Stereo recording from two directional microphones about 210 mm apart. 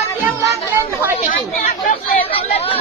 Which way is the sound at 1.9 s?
30° left (ahead or behind).